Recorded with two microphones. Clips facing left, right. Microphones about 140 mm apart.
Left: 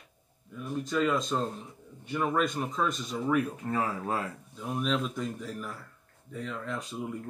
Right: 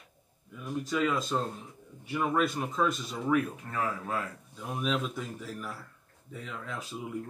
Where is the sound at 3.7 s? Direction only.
30° left (ahead or behind).